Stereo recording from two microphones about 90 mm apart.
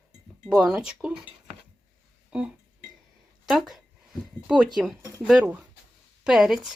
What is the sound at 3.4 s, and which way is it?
Speech, 5° right (ahead or behind).